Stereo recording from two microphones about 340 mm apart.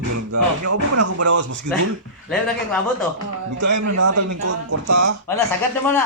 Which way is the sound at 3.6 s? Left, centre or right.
Right.